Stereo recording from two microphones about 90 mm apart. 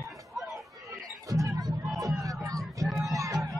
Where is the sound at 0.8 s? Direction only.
40° right (ahead or behind).